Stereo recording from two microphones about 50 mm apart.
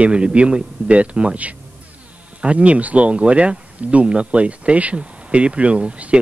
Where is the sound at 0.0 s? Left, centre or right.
Right.